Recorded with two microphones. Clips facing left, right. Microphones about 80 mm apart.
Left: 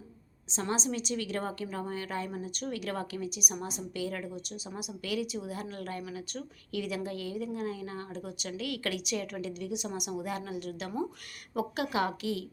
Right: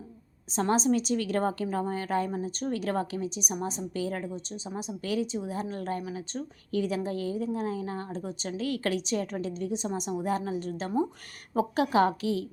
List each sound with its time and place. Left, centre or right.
0.5 s a woman's voice: right